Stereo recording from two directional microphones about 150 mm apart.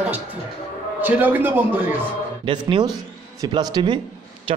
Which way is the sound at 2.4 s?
35° right (ahead or behind).